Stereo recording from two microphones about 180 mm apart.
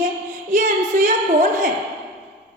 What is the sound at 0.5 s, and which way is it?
Speech, 45° right (ahead or behind).